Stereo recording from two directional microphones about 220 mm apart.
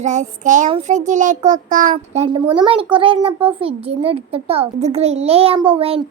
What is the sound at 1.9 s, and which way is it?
A child's voice, 25° right (ahead or behind).